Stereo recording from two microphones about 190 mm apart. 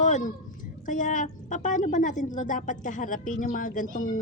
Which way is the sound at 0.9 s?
45° left (ahead or behind).